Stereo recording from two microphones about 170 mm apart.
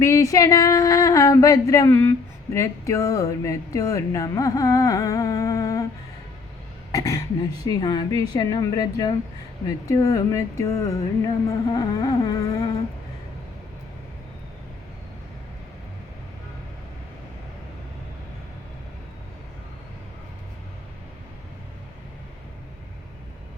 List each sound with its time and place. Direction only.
0.0 s speech: 20° left (ahead or behind)
6.9 s speech: 20° left (ahead or behind)